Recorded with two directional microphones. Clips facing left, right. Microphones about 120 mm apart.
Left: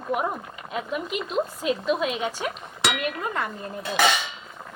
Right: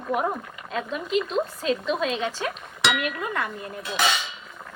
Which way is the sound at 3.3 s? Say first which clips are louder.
Even; 35° left (ahead or behind).